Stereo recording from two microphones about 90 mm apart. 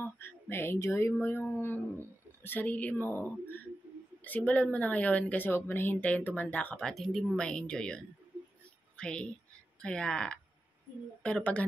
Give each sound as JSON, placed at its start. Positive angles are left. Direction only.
{"t": 0.0, "sound": "a woman's voice", "side_deg": 25}
{"t": 6.9, "sound": "a woman's voice", "side_deg": 0}